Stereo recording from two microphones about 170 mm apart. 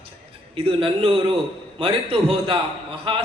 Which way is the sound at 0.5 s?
35° right (ahead or behind).